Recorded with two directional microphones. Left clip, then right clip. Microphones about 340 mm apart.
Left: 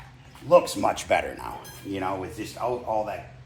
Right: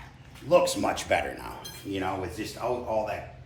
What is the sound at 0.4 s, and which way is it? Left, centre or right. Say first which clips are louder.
A man's voice: left 3 dB; centre.